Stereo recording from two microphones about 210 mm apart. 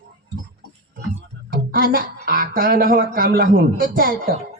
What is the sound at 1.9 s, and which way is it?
A woman's voice, 45° right (ahead or behind).